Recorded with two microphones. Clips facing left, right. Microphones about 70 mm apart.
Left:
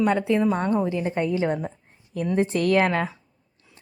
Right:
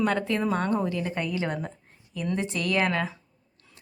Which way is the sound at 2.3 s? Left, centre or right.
Left.